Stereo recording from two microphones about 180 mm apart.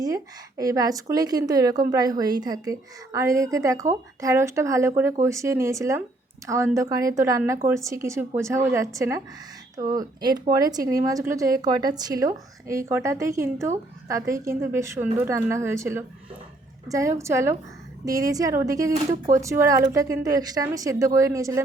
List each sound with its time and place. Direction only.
0.0 s a woman's voice: 20° right (ahead or behind)